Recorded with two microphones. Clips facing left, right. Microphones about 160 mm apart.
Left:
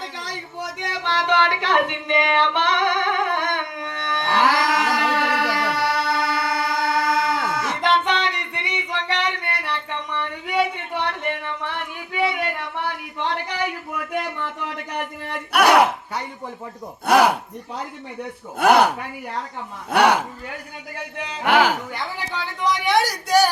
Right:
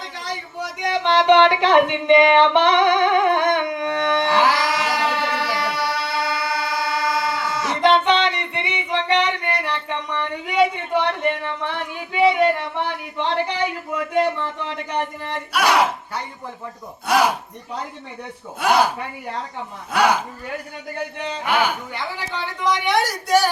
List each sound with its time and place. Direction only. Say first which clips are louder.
1.0 s music: right 7 dB; 20° right (ahead or behind)
4.5 s music: left 1 dB; 55° left (ahead or behind)
7.8 s music: right 6 dB; 20° right (ahead or behind)
14.1 s a sound: right 8 dB; 25° right (ahead or behind)
15.5 s speech: left 3 dB; 60° left (ahead or behind)
17.1 s speech: left 3 dB; 60° left (ahead or behind)
18.6 s speech: left 3 dB; 65° left (ahead or behind)
21.4 s a man's voice: left 4 dB; 85° left
22.4 s a woman's voice: right 1 dB; centre (ahead or behind)